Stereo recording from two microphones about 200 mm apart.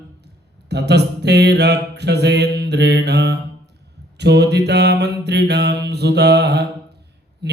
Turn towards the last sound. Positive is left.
turn(degrees=-55)  # may be behind; listen again after turning